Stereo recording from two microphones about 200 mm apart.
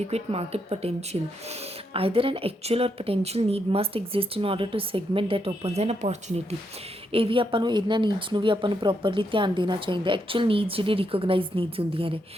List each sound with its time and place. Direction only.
0.1 s speech: 30° right (ahead or behind)